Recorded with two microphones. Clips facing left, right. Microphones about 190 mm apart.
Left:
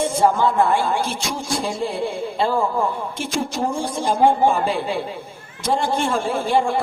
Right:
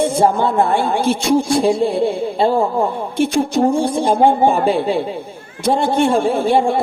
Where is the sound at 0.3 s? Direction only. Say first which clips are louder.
Right 2 dB; 60° right (ahead or behind).